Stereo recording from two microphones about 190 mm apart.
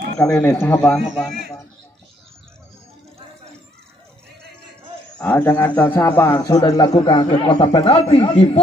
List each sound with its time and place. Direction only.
0.2 s a man's voice: 15° left (ahead or behind)
5.2 s a man's voice: 10° left (ahead or behind); by 8.5 s 30° left (ahead or behind)